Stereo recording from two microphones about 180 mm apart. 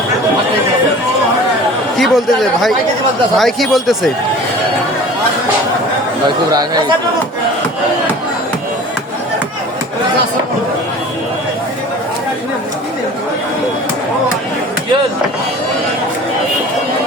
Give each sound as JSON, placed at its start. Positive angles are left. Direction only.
{"t": 2.0, "sound": "speech", "side_deg": 0}
{"t": 6.2, "sound": "speech", "side_deg": -20}